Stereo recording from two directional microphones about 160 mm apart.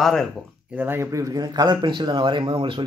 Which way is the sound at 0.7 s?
15° right (ahead or behind).